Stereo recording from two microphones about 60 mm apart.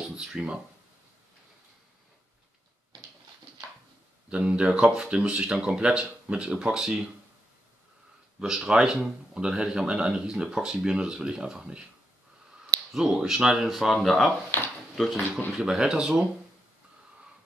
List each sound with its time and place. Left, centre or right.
0.0 s speech: centre
4.3 s speech: centre
8.4 s speech: centre
12.9 s speech: centre
15.5 s speech: centre